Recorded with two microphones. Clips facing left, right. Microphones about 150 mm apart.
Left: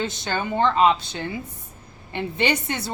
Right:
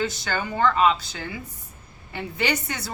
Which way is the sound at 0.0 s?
20° left (ahead or behind).